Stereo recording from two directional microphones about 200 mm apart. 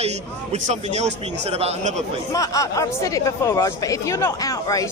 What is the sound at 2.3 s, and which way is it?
Speech, 15° left (ahead or behind).